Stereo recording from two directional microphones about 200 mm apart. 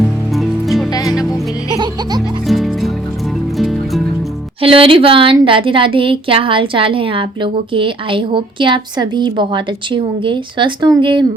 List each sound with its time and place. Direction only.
0.0 s music: centre (ahead or behind)
1.7 s music: 20° right (ahead or behind)
2.5 s music: centre (ahead or behind)
4.6 s a woman's voice: 25° right (ahead or behind)